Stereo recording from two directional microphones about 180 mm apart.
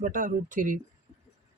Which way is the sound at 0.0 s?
45° right (ahead or behind).